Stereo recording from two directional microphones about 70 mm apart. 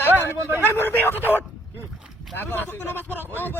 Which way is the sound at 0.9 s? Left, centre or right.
Left.